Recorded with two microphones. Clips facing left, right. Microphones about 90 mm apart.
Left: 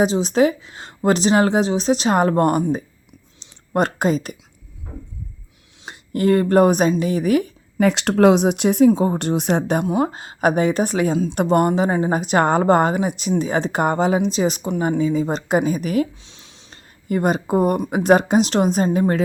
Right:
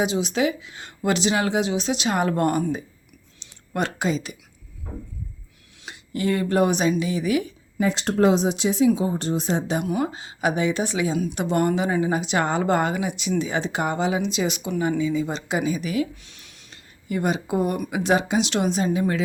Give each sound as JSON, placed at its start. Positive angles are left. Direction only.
{"t": 0.0, "sound": "speech", "side_deg": 35}
{"t": 3.4, "sound": "a sound", "side_deg": 40}
{"t": 5.8, "sound": "speech", "side_deg": 45}
{"t": 7.8, "sound": "speech", "side_deg": 75}
{"t": 9.1, "sound": "a woman's voice", "side_deg": 65}
{"t": 9.8, "sound": "speech", "side_deg": 30}
{"t": 10.1, "sound": "speech", "side_deg": 45}
{"t": 16.2, "sound": "a sound", "side_deg": 25}
{"t": 17.1, "sound": "speech", "side_deg": 45}